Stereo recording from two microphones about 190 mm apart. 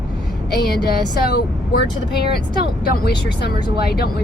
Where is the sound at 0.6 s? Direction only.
55° left (ahead or behind).